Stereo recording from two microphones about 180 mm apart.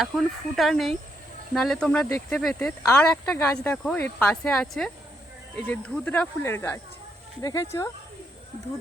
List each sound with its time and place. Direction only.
0.0 s speech: centre (ahead or behind); by 7.9 s 15° left (ahead or behind)